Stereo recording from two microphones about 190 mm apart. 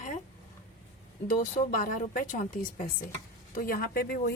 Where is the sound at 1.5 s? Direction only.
45° left (ahead or behind).